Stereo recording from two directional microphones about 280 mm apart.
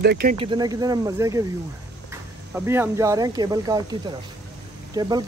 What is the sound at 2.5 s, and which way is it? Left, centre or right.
Speech, centre.